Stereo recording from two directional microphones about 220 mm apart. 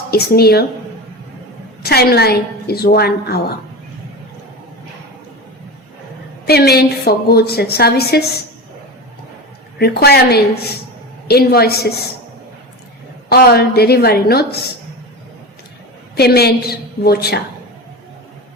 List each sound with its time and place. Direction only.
0.1 s a woman's voice: 45° left (ahead or behind)
1.8 s a woman's voice: 45° left (ahead or behind)
6.4 s a woman's voice: 45° left (ahead or behind)
9.7 s a woman's voice: 45° left (ahead or behind)
13.3 s a woman's voice: 45° left (ahead or behind)
16.1 s a woman's voice: 45° left (ahead or behind)